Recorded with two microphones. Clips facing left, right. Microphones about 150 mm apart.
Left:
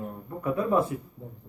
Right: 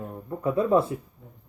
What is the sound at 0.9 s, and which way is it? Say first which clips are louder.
Speech: right 1 dB; 25° right (ahead or behind).